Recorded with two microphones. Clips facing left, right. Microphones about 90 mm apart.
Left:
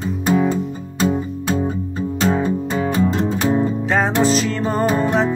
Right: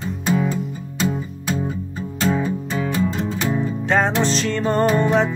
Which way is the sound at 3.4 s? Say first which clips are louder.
Left 5 dB; 30° left (ahead or behind).